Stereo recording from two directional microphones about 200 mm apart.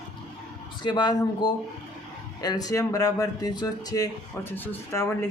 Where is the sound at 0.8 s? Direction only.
20° left (ahead or behind).